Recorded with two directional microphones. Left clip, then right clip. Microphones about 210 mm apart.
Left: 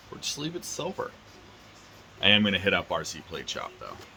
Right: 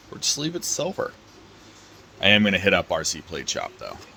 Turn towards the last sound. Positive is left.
turn(degrees=-30)  # may be behind; listen again after turning